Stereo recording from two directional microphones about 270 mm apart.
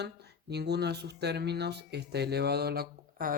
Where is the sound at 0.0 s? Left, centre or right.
Right.